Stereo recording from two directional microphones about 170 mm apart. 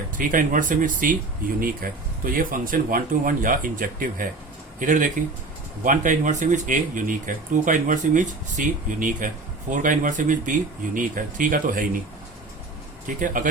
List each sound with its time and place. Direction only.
0.2 s speech: 50° right (ahead or behind)
13.1 s speech: 50° right (ahead or behind)